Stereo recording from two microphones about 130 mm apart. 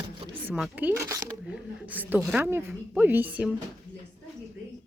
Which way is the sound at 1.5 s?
15° right (ahead or behind).